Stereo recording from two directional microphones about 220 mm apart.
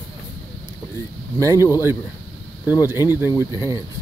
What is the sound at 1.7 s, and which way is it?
Speech, 10° right (ahead or behind).